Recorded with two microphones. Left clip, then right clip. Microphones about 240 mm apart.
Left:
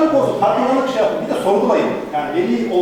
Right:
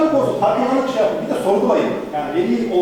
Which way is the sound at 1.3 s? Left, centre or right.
Left.